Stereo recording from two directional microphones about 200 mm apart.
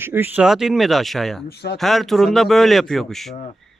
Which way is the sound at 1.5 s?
55° left (ahead or behind).